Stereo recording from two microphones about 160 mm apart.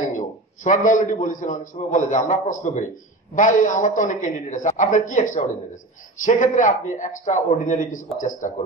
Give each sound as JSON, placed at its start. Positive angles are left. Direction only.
{"t": 0.1, "sound": "a man's voice", "side_deg": 50}